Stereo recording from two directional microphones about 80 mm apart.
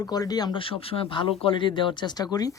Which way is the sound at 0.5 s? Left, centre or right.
Left.